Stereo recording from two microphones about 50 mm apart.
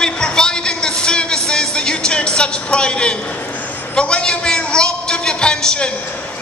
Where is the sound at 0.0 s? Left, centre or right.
Centre.